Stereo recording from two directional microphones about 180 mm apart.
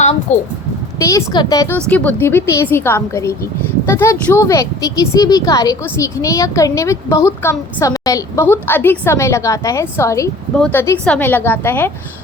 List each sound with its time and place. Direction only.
0.3 s speech: 40° left (ahead or behind)
0.9 s speech: 15° left (ahead or behind)